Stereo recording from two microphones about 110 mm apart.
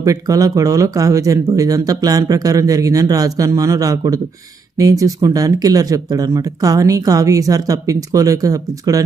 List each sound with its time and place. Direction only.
0.0 s speech: 30° right (ahead or behind)